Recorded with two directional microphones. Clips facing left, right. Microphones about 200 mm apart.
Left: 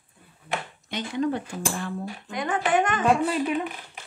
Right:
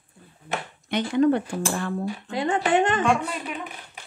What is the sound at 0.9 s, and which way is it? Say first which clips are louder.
Speech: right 6 dB; 60° right (ahead or behind).